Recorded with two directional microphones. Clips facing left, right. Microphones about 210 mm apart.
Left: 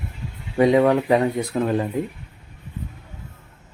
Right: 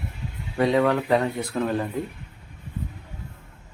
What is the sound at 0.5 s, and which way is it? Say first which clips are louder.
Speech: left 5 dB; 15° left (ahead or behind).